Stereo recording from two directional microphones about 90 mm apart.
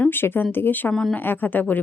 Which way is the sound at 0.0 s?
25° left (ahead or behind).